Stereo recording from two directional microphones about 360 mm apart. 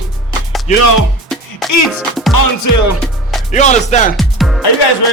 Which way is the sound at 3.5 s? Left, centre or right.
Centre.